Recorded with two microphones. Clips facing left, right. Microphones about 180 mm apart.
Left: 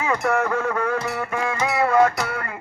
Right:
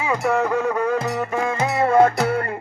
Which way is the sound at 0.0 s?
15° right (ahead or behind).